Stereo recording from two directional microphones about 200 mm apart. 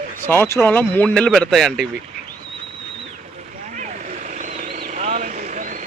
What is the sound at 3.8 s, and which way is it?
Vehicle, 40° right (ahead or behind).